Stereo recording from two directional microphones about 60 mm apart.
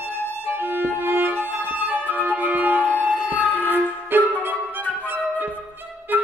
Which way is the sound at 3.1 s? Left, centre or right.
Left.